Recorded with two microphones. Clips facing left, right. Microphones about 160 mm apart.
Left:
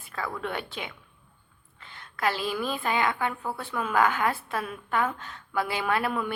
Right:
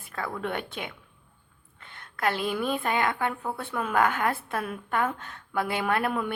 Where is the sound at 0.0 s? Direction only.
55° right (ahead or behind).